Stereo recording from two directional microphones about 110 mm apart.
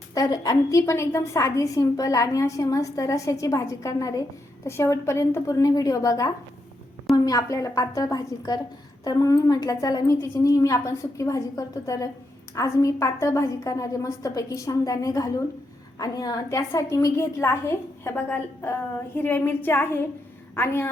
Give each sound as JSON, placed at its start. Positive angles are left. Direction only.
{"t": 0.1, "sound": "a woman's voice", "side_deg": 35}